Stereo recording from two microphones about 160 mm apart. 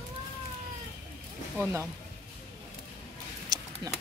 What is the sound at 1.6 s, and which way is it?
Speech, 15° right (ahead or behind).